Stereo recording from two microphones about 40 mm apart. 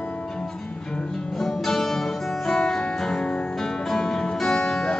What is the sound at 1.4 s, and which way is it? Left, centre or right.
Music, centre.